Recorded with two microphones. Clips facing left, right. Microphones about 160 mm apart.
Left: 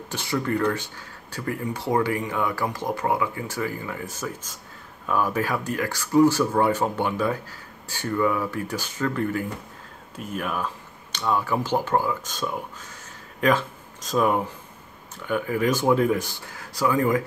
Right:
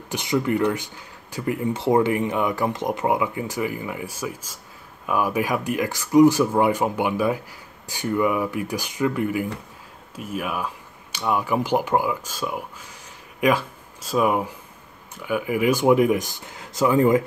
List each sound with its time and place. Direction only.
0.1 s speech: 15° right (ahead or behind)